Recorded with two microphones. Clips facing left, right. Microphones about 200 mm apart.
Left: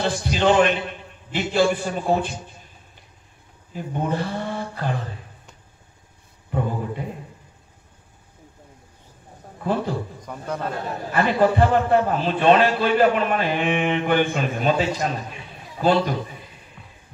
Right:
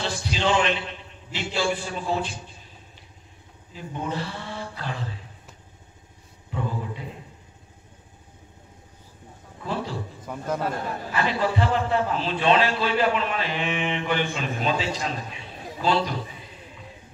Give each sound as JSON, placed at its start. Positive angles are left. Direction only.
{"t": 0.0, "sound": "a man's voice", "side_deg": 50}
{"t": 3.7, "sound": "a man's voice", "side_deg": 50}
{"t": 6.5, "sound": "speech", "side_deg": 50}
{"t": 9.6, "sound": "a man's voice", "side_deg": 50}
{"t": 11.1, "sound": "a man's voice", "side_deg": 50}